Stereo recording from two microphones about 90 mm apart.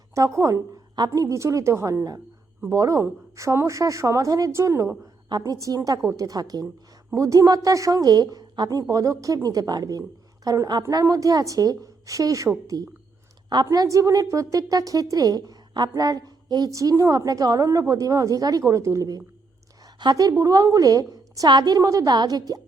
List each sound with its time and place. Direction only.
0.3 s a woman's voice: 35° right (ahead or behind)
10.8 s a woman's voice: 35° right (ahead or behind); by 21.8 s 55° right (ahead or behind)
21.8 s a woman's voice: 35° right (ahead or behind)